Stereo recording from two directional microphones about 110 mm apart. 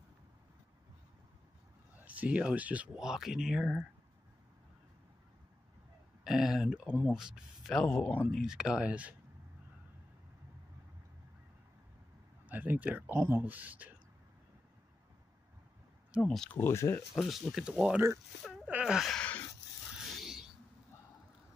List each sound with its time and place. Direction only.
2.0 s speech: 10° right (ahead or behind)
6.2 s speech: 5° right (ahead or behind)
12.4 s speech: 15° right (ahead or behind)
16.3 s speech: 5° left (ahead or behind)
16.5 s speech: 25° left (ahead or behind)
17.1 s speech: centre (ahead or behind)
19.1 s a sound: 15° left (ahead or behind)
20.1 s a sound: centre (ahead or behind)